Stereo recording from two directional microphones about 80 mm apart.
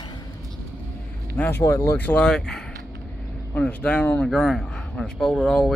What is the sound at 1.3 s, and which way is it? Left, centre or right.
Speech, left.